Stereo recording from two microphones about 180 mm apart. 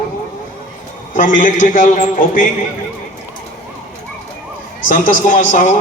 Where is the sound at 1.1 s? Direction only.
45° left (ahead or behind).